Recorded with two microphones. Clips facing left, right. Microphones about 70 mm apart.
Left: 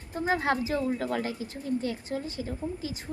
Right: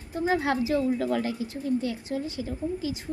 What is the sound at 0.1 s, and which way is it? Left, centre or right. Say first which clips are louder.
A woman's voice: right 2 dB; left.